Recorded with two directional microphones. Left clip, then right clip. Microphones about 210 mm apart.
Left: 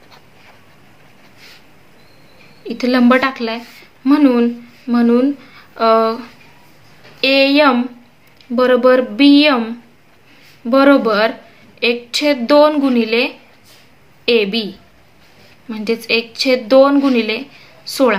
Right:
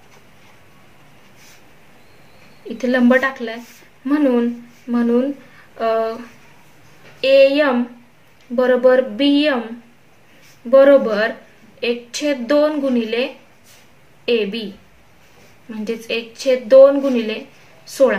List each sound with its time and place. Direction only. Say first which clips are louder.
2.7 s a woman's voice: left 2 dB; 40° left (ahead or behind)
7.2 s a woman's voice: even; 35° left (ahead or behind)
10.7 s a woman's voice: right 1 dB; 40° left (ahead or behind)
15.7 s a woman's voice: left 6 dB; 40° left (ahead or behind)